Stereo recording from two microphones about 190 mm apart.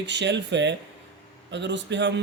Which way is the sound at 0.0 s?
70° right (ahead or behind).